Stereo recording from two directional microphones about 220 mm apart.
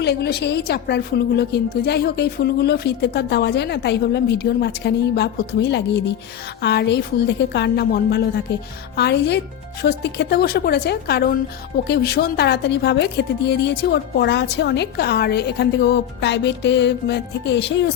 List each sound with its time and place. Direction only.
0.0 s a woman's voice: 50° left (ahead or behind)